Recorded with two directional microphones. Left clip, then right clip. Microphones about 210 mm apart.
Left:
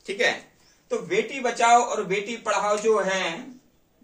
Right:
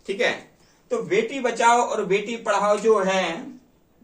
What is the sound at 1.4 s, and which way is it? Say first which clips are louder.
A man's voice: left 1 dB; 15° left (ahead or behind).